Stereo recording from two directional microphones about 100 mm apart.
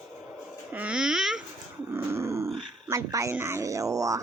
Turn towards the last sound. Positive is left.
turn(degrees=-35)  # may be behind; listen again after turning